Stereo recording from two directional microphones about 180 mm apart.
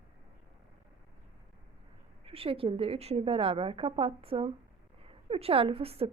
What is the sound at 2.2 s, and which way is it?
A woman's voice, 30° right (ahead or behind).